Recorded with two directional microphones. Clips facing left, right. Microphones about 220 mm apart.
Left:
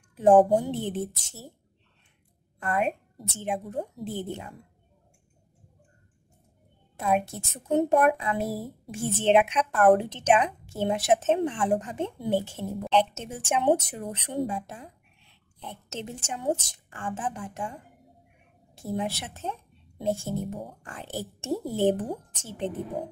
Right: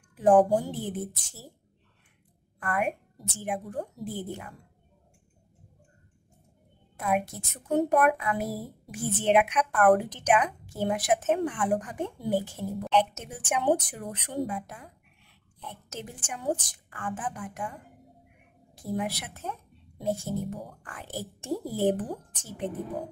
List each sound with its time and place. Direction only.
0.1 s a sound: 25° left (ahead or behind)
0.5 s speech: 25° left (ahead or behind)
2.6 s speech: 25° left (ahead or behind)
7.0 s speech: 25° left (ahead or behind)
18.8 s speech: 25° left (ahead or behind)